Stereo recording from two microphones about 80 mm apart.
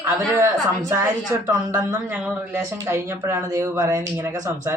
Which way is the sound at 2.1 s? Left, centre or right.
Right.